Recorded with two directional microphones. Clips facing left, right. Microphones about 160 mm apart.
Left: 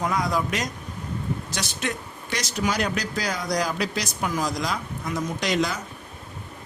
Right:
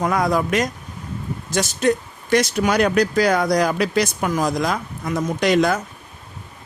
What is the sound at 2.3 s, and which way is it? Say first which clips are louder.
Speech: right 9 dB; 60° right (ahead or behind).